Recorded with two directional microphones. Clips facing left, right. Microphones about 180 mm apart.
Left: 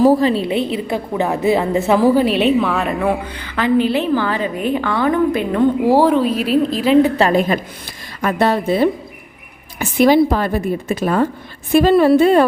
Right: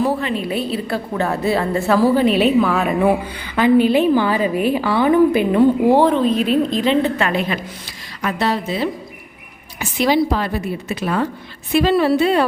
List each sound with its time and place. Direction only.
0.0 s a woman's voice: 35° left (ahead or behind)
0.4 s a woman's voice: 20° left (ahead or behind)
2.2 s a woman's voice: centre (ahead or behind)
5.9 s a woman's voice: 10° left (ahead or behind)
7.2 s a woman's voice: 40° left (ahead or behind)